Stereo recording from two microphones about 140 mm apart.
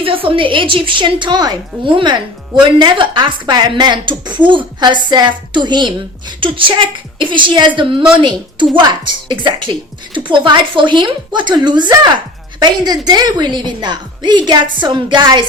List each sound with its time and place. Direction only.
0.0 s a woman's voice: 40° right (ahead or behind)